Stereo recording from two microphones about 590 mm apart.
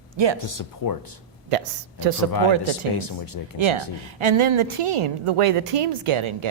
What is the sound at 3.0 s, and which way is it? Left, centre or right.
Speech, left.